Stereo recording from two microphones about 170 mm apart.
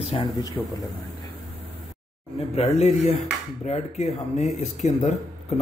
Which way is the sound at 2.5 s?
40° left (ahead or behind).